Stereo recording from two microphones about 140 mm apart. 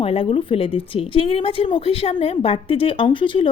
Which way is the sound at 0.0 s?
40° left (ahead or behind).